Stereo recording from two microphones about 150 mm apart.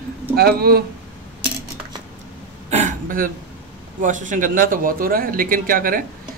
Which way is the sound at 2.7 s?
60° right (ahead or behind).